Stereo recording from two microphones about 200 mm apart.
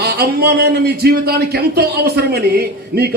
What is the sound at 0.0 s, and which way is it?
A man's voice, 50° right (ahead or behind).